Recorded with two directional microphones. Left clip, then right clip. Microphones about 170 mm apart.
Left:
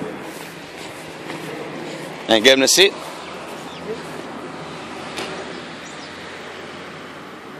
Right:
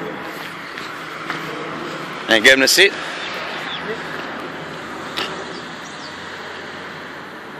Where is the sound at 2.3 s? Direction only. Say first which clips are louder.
Right 1 dB; 30° left (ahead or behind).